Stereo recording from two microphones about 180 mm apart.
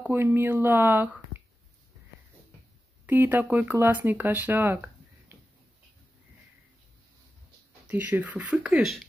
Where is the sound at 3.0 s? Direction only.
10° right (ahead or behind).